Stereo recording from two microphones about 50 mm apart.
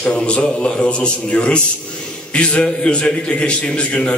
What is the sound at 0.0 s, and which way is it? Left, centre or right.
A man's voice, left.